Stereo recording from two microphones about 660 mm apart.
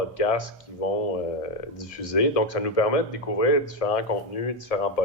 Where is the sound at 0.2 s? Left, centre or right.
Left.